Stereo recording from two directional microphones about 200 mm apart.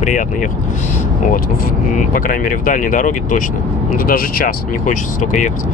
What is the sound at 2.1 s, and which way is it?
Speech, 45° left (ahead or behind).